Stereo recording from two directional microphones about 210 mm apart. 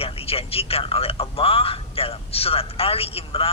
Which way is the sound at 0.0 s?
25° left (ahead or behind).